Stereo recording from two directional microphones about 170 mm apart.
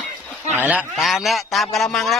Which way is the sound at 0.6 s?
5° right (ahead or behind).